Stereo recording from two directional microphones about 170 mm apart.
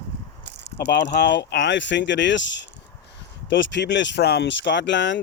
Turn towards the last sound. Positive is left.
turn(degrees=90)